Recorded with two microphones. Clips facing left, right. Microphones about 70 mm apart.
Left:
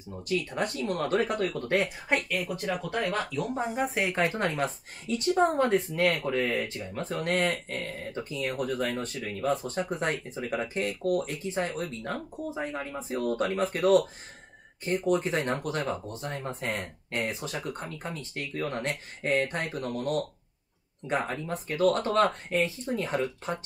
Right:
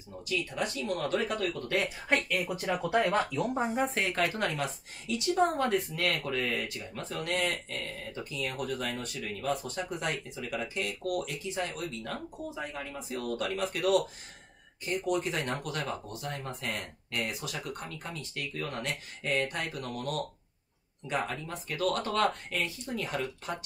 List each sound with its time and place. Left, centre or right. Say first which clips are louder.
0.3 s speech: left 3 dB; left
1.5 s speech: left 4 dB; left
2.0 s speech: left 1 dB; centre
2.4 s speech: even; centre
3.5 s speech: left 1 dB; centre
4.0 s speech: left 3 dB; left
4.5 s speech: left 4 dB; left